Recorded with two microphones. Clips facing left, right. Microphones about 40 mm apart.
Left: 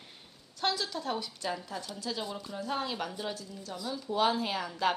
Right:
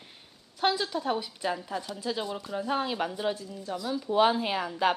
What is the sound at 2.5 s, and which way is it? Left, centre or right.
Speech, centre.